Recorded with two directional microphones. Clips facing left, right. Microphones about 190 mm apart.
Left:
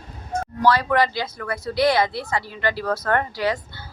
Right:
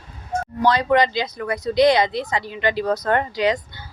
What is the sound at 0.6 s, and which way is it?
Speech, 20° right (ahead or behind).